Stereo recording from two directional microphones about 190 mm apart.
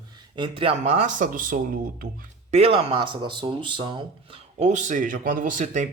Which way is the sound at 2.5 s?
30° right (ahead or behind).